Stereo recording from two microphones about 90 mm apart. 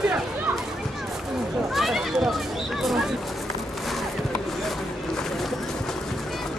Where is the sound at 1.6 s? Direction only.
5° right (ahead or behind).